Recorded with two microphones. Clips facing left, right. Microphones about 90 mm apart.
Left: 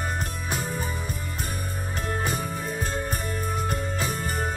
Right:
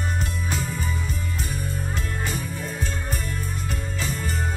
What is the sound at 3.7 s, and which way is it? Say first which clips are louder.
Music: left 2 dB; 50° left (ahead or behind).